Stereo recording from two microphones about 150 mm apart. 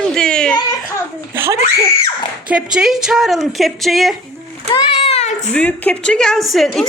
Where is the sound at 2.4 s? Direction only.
5° right (ahead or behind).